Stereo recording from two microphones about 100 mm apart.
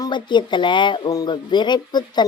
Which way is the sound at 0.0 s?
50° left (ahead or behind).